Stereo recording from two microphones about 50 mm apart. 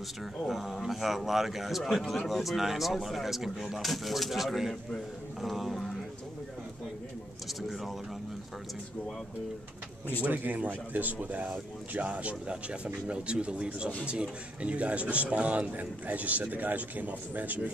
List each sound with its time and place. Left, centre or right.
0.4 s a man's voice: centre
7.6 s a man's voice: centre
10.2 s a man's voice: right